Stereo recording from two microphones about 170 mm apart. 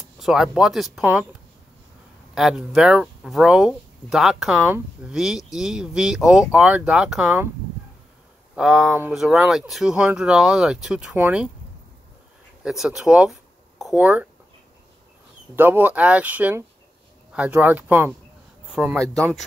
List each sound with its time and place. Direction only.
0.2 s speech: centre (ahead or behind)
2.3 s speech: 5° right (ahead or behind)
8.5 s speech: centre (ahead or behind)
12.6 s speech: 5° right (ahead or behind)
15.5 s speech: 10° right (ahead or behind)